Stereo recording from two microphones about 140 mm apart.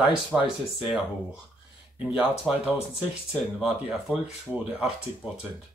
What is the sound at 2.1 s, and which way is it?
Speech, 5° right (ahead or behind).